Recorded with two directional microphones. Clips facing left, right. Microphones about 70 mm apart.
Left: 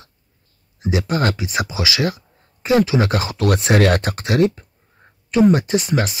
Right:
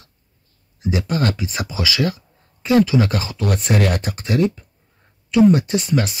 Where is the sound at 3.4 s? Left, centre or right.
Left.